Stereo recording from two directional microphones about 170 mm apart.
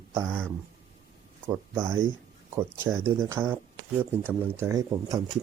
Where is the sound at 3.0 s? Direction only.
15° right (ahead or behind).